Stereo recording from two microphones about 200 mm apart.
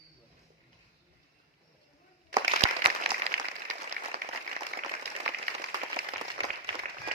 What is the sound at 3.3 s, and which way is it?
Applause, 50° right (ahead or behind).